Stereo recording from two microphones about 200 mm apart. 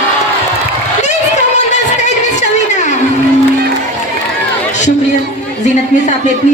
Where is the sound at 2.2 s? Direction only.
35° left (ahead or behind).